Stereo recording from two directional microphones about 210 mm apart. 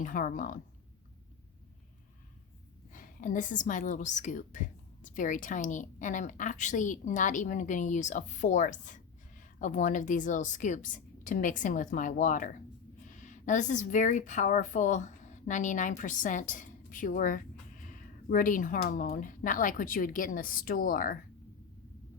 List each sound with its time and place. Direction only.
0.0 s a woman's voice: 40° left (ahead or behind)
2.9 s a woman's voice: 40° left (ahead or behind)